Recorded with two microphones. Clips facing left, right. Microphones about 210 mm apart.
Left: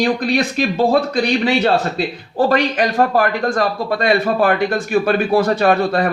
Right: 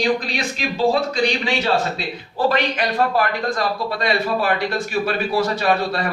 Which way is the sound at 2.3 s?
45° left (ahead or behind).